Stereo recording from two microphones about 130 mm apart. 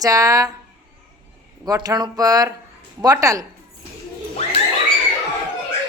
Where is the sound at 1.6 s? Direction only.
30° right (ahead or behind).